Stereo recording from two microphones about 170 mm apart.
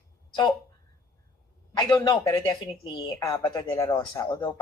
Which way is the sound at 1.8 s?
20° left (ahead or behind).